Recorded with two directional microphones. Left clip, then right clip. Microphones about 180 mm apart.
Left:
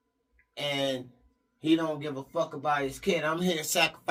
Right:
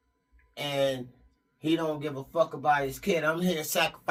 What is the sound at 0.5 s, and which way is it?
Speech, 15° left (ahead or behind).